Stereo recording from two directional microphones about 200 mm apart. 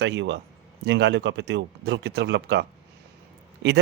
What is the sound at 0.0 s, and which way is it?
Speech, 60° right (ahead or behind).